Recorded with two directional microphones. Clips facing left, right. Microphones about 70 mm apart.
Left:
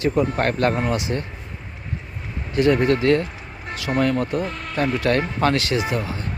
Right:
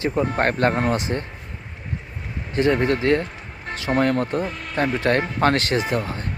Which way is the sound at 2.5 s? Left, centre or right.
Right.